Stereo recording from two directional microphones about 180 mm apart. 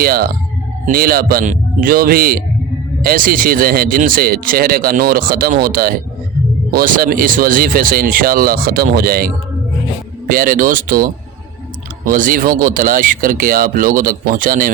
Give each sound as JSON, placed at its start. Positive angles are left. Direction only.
{"t": 0.0, "sound": "a man's voice", "side_deg": -55}